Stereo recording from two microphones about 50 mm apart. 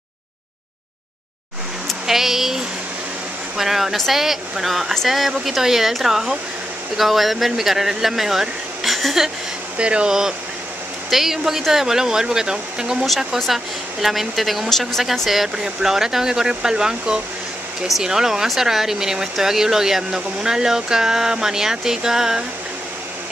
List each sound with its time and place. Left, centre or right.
2.0 s speech: centre
9.8 s speech: right
11.1 s speech: centre
14.0 s speech: centre
15.2 s speech: centre